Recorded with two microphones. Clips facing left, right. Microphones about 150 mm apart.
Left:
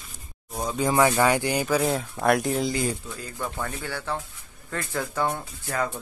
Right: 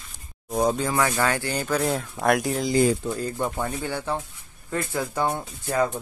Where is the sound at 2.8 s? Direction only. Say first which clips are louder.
Right 8 dB; 40° right (ahead or behind).